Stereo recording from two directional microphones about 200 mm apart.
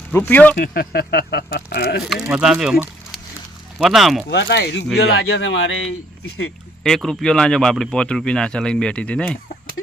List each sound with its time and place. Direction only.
0.1 s speech: 10° left (ahead or behind)
0.5 s speech: 45° left (ahead or behind)
2.2 s speech: 5° right (ahead or behind)
4.3 s speech: 55° left (ahead or behind); by 6.5 s 85° left
6.8 s speech: centre (ahead or behind)